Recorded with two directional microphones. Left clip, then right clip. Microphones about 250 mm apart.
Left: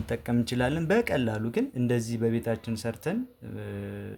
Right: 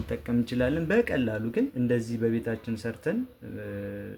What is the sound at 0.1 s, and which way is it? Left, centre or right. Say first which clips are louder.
Speech: left 1 dB; left.